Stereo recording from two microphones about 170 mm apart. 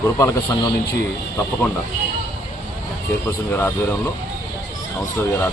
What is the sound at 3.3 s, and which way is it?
Speech, 10° left (ahead or behind).